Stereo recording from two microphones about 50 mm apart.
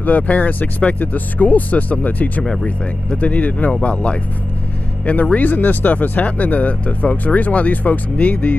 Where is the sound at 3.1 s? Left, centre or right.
Left.